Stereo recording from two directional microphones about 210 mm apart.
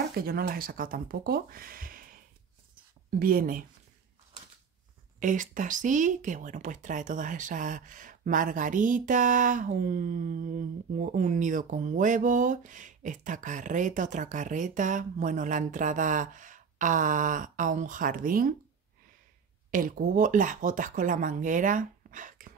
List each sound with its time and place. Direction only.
0.2 s speech: 45° right (ahead or behind)
3.2 s speech: 45° right (ahead or behind)
5.2 s speech: 40° right (ahead or behind)
19.7 s speech: 40° right (ahead or behind)